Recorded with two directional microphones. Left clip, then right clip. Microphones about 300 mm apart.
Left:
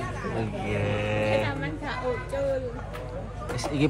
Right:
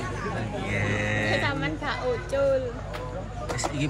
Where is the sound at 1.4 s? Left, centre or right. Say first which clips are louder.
Right 3 dB; centre.